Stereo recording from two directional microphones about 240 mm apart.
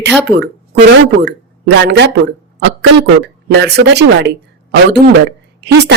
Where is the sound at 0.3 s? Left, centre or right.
Right.